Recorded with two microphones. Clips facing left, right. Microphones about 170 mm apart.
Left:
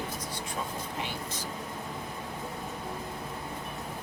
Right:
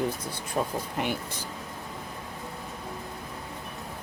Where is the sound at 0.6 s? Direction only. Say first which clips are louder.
Right 9 dB; 55° right (ahead or behind).